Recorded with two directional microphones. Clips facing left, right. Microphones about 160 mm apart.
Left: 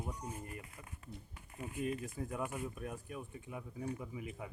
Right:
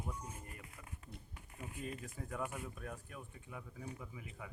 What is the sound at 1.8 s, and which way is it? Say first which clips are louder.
Speech: left 8 dB; 15° left (ahead or behind).